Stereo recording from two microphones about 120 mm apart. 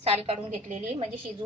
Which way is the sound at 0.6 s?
75° right (ahead or behind).